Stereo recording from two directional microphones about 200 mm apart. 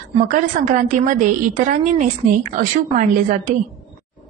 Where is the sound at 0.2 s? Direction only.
35° right (ahead or behind).